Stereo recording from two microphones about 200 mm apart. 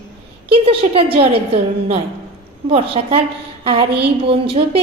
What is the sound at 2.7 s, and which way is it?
A woman's voice, 25° right (ahead or behind).